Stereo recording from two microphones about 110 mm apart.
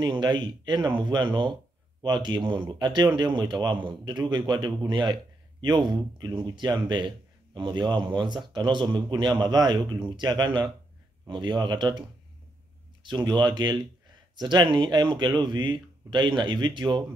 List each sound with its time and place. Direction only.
0.0 s speech: 40° right (ahead or behind)
13.0 s speech: 40° right (ahead or behind)